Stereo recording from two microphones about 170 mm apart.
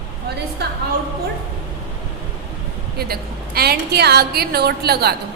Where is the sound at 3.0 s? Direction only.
65° right (ahead or behind).